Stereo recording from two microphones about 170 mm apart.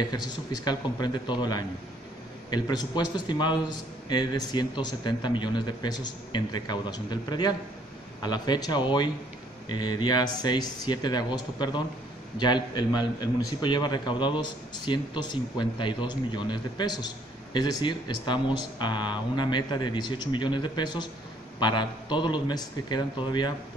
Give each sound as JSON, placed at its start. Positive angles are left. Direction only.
{"t": 0.0, "sound": "a man's voice", "side_deg": 25}